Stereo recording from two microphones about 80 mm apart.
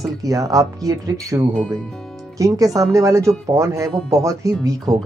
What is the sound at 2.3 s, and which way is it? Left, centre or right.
Speech, right.